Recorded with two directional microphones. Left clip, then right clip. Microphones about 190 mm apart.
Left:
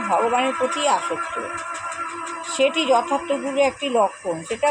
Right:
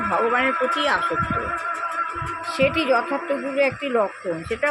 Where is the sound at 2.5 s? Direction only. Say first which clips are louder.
Left 1 dB; 10° right (ahead or behind).